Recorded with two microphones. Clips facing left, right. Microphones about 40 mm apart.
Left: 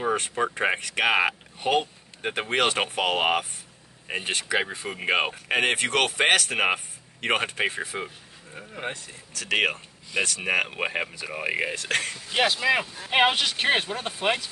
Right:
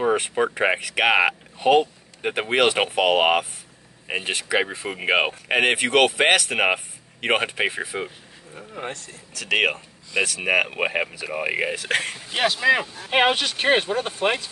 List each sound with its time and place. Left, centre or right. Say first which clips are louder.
0.0 s a man's voice: right 4 dB; centre
8.5 s speech: right 1 dB; centre
9.4 s a man's voice: right 3 dB; centre
12.0 s speech: right 2 dB; right
12.3 s speech: right 3 dB; centre